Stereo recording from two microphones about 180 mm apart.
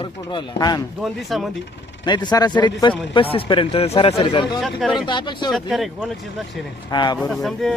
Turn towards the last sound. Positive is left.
turn(degrees=0)  # may be behind; listen again after turning